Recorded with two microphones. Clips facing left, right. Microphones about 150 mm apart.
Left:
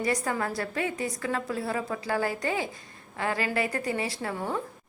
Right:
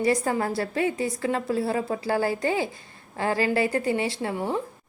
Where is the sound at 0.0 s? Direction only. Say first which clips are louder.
Right 5 dB; 30° right (ahead or behind).